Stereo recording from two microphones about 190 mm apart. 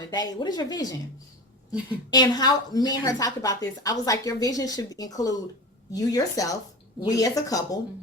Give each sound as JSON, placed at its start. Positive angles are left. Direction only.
{"t": 0.1, "sound": "a woman's voice", "side_deg": 20}
{"t": 2.0, "sound": "a woman's voice", "side_deg": 20}